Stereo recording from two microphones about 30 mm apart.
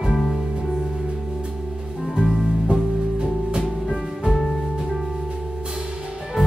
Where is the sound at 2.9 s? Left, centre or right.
Right.